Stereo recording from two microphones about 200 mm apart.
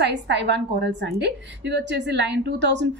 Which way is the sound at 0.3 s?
60° right (ahead or behind).